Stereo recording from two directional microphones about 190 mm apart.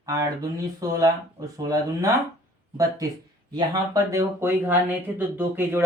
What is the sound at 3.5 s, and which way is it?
Speech, 20° right (ahead or behind).